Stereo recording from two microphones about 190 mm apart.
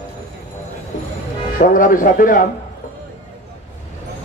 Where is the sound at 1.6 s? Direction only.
45° left (ahead or behind).